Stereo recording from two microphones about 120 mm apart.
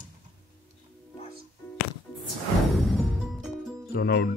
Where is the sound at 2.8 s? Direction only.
Centre (ahead or behind).